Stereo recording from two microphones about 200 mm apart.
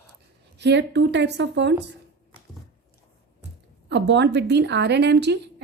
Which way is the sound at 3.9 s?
60° right (ahead or behind).